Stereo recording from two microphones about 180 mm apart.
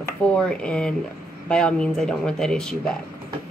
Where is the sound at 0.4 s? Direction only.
5° left (ahead or behind).